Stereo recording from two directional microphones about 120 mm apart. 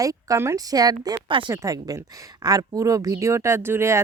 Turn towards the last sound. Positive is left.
turn(degrees=-20)  # may be behind; listen again after turning